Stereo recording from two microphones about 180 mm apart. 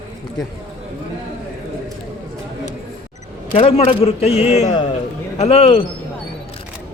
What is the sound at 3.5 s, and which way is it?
Speech, 35° left (ahead or behind).